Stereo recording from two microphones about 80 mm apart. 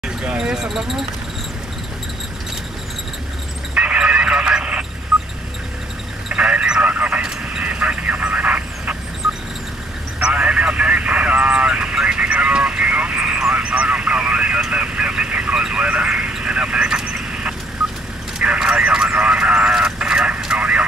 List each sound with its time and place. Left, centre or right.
0.2 s speech: centre
3.7 s a sound: centre
6.2 s radio: centre
9.2 s vehicle: centre